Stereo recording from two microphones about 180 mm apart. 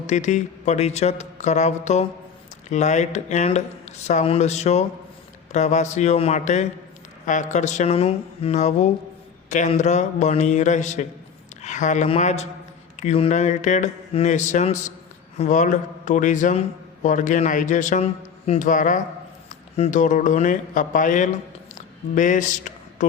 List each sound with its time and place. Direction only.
0.1 s a man's voice: 40° left (ahead or behind)